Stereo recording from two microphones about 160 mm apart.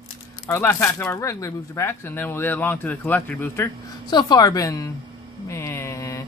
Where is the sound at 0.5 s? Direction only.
15° left (ahead or behind).